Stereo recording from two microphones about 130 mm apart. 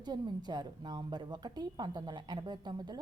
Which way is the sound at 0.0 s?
35° right (ahead or behind).